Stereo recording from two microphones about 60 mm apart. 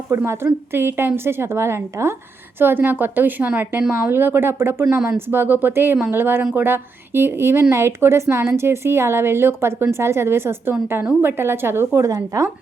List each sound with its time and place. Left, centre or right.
0.3 s a woman's voice: right
2.6 s a woman's voice: right
11.9 s a woman's voice: right